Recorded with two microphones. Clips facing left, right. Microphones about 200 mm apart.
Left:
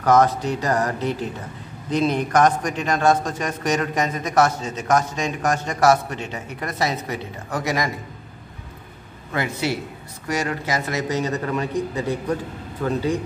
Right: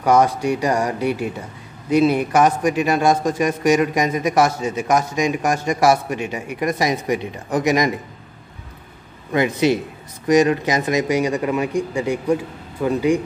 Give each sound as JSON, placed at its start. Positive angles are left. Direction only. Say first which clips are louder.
{"t": 0.0, "sound": "a man's voice", "louder": "right 1 dB", "side_deg": -10}
{"t": 9.3, "sound": "a man's voice", "louder": "right 7 dB", "side_deg": -20}